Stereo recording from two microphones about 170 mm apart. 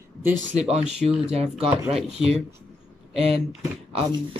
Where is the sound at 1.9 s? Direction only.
Centre (ahead or behind).